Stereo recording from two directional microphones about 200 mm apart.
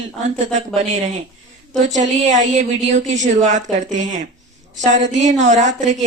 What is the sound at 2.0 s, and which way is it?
Speech, 35° right (ahead or behind).